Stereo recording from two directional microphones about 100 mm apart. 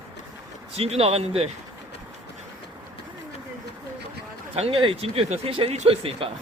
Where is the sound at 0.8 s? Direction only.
80° right.